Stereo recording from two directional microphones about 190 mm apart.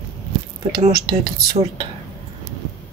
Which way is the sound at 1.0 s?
20° right (ahead or behind).